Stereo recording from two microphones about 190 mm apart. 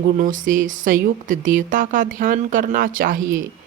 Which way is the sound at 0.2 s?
45° right (ahead or behind).